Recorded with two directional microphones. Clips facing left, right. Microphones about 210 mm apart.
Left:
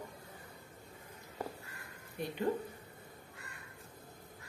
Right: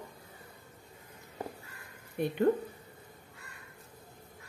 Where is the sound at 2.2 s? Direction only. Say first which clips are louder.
Right 8 dB; 60° right (ahead or behind).